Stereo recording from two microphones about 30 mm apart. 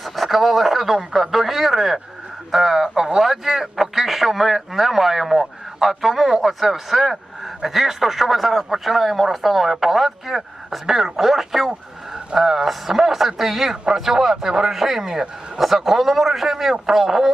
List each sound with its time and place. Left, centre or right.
0.0 s radio: centre
2.5 s speech: centre
12.3 s speech: right
12.6 s speech: centre
14.7 s a man's voice: centre